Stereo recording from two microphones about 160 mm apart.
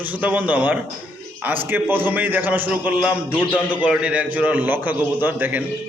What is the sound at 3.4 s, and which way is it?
Speech, 10° left (ahead or behind).